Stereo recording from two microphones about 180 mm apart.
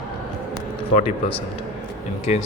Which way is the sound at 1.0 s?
40° left (ahead or behind).